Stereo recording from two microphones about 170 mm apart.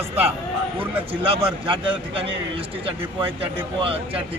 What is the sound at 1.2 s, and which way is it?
Speech, 30° right (ahead or behind).